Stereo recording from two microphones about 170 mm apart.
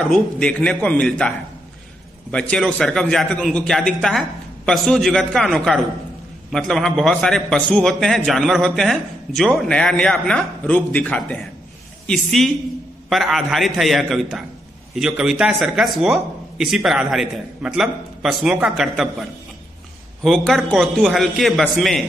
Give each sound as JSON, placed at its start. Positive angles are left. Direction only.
{"t": 0.1, "sound": "a man's voice", "side_deg": 5}
{"t": 2.3, "sound": "speech", "side_deg": 5}
{"t": 20.2, "sound": "speech", "side_deg": 0}